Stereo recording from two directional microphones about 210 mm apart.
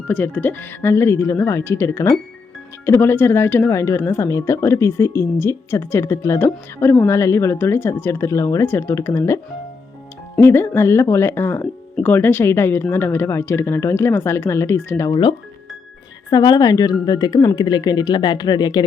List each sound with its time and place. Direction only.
0.1 s a woman's voice: 10° left (ahead or behind)